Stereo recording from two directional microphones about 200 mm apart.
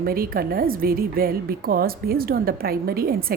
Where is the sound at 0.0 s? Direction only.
45° right (ahead or behind).